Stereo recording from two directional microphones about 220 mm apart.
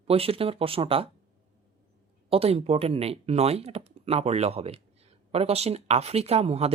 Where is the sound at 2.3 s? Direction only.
25° right (ahead or behind).